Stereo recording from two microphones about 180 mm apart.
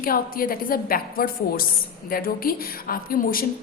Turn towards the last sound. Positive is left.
turn(degrees=50)  # may be behind; listen again after turning